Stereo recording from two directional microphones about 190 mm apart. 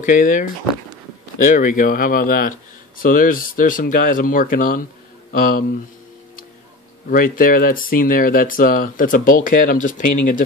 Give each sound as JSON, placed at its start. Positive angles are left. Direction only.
{"t": 0.0, "sound": "speech", "side_deg": 45}
{"t": 7.1, "sound": "speech", "side_deg": 45}